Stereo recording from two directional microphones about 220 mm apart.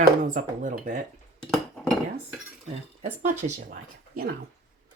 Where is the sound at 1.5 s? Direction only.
Centre (ahead or behind).